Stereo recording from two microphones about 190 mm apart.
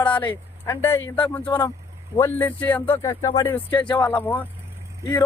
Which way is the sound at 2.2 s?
10° left (ahead or behind).